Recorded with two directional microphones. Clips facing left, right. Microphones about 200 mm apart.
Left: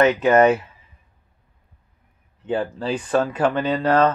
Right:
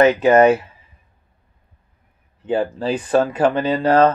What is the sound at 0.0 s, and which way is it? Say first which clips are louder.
Speech: right 3 dB; 35° right (ahead or behind).